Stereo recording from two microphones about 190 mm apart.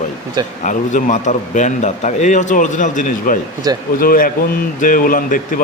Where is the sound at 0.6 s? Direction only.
40° left (ahead or behind).